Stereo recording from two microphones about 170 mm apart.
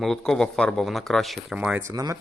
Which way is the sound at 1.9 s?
20° right (ahead or behind).